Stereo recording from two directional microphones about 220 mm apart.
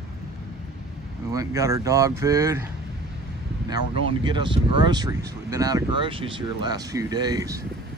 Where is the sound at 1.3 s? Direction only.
15° right (ahead or behind).